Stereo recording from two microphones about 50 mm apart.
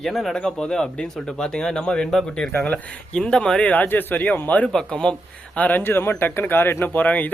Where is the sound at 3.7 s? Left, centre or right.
Left.